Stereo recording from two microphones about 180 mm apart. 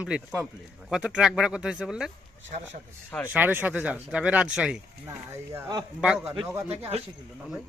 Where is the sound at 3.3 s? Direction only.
10° right (ahead or behind).